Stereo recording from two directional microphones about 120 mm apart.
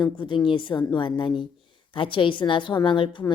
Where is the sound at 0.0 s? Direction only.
40° left (ahead or behind).